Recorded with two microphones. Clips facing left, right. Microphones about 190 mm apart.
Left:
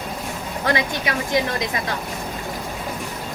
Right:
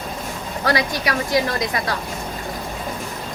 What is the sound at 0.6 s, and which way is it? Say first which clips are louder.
Speech: right 2 dB; 20° left (ahead or behind).